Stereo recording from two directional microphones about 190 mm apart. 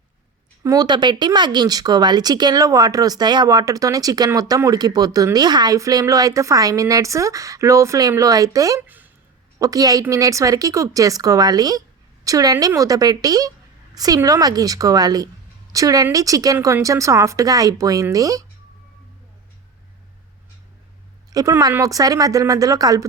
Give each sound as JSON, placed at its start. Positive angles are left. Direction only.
{"t": 0.6, "sound": "a woman's voice", "side_deg": -20}
{"t": 21.3, "sound": "a woman's voice", "side_deg": -20}